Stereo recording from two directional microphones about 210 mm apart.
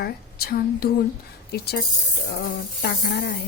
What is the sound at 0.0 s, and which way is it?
A woman's voice, 45° left (ahead or behind).